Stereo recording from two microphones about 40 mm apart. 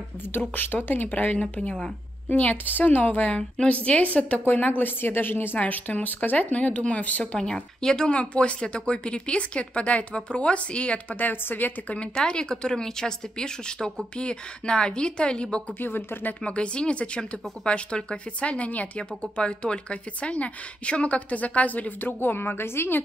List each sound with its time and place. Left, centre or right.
0.3 s a woman's voice: left
1.3 s a woman's voice: left
2.2 s speech: left
3.3 s a woman's voice: left
3.7 s a woman's voice: left
5.6 s speech: left
7.3 s speech: centre
8.1 s a woman's voice: left
11.1 s speech: left
12.2 s a woman's voice: left
15.8 s a woman's voice: left
16.4 s a woman's voice: left
18.9 s speech: left